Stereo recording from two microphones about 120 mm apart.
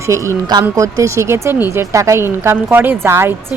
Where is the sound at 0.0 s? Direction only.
25° right (ahead or behind).